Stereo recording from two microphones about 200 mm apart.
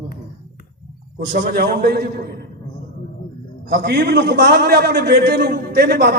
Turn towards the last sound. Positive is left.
turn(degrees=-55)  # may be behind; listen again after turning